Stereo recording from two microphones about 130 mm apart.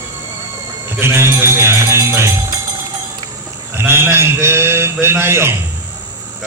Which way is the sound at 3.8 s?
20° right (ahead or behind).